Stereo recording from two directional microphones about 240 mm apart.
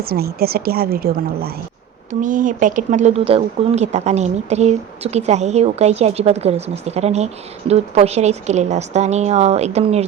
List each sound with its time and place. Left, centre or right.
0.0 s a woman's voice: right